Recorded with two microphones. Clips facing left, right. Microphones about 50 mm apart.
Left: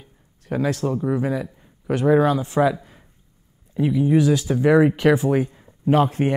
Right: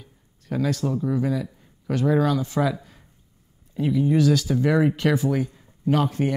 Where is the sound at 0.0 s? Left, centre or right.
Left.